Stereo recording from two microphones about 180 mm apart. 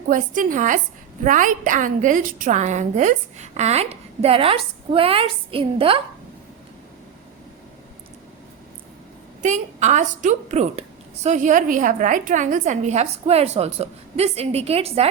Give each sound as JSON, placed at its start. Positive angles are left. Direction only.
{"t": 0.1, "sound": "a woman's voice", "side_deg": -45}
{"t": 9.4, "sound": "a woman's voice", "side_deg": -40}